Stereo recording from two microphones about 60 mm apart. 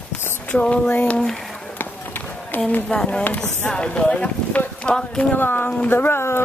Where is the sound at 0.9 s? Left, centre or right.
Centre.